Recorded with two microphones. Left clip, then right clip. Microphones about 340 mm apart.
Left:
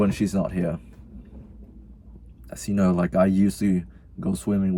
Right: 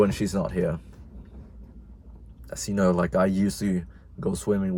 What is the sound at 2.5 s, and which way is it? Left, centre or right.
Speech, centre.